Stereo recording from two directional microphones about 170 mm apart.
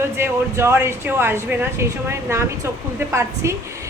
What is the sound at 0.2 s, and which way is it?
Speech, 15° right (ahead or behind).